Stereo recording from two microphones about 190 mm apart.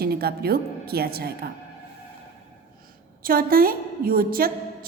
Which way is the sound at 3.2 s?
50° right (ahead or behind).